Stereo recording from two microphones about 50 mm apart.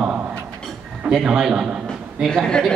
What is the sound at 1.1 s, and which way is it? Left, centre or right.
Speech, centre.